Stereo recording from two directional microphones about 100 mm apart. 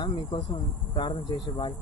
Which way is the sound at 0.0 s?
55° left (ahead or behind).